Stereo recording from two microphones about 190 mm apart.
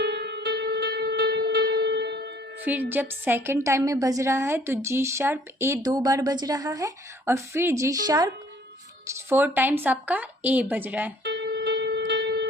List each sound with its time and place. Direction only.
0.0 s music: 60° right (ahead or behind)
2.6 s a woman's voice: 10° right (ahead or behind)
11.2 s music: 65° right (ahead or behind)